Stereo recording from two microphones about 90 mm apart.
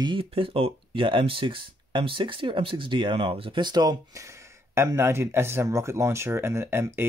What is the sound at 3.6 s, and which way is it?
Speech, 50° right (ahead or behind).